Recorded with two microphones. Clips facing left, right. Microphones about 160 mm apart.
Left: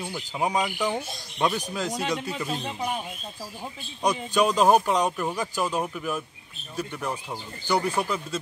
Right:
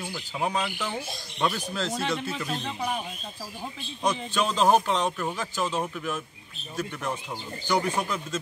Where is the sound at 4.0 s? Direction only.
10° left (ahead or behind).